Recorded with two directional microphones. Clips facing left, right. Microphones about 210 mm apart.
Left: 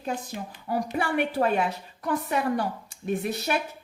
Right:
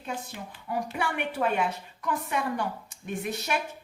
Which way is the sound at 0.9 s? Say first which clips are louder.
Left 7 dB; 40° left (ahead or behind).